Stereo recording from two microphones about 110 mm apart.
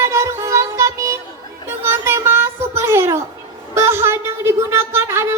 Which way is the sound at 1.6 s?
25° right (ahead or behind).